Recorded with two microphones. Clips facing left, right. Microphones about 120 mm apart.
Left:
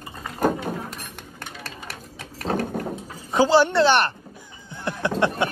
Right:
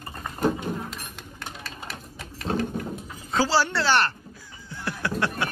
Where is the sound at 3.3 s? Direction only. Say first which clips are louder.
Left 6 dB; 20° left (ahead or behind).